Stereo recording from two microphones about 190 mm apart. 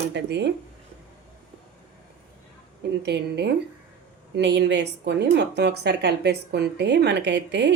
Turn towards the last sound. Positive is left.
turn(degrees=-65)  # may be behind; listen again after turning